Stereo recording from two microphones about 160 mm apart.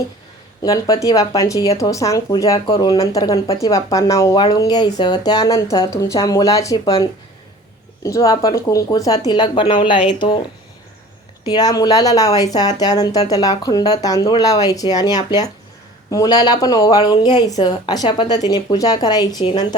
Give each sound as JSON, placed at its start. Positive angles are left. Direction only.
{"t": 0.6, "sound": "speech", "side_deg": 20}
{"t": 3.3, "sound": "speech", "side_deg": 35}
{"t": 3.6, "sound": "speech", "side_deg": 20}
{"t": 11.4, "sound": "speech", "side_deg": 25}